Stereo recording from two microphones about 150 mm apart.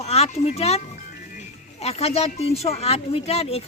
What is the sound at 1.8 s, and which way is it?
Speech, 45° left (ahead or behind).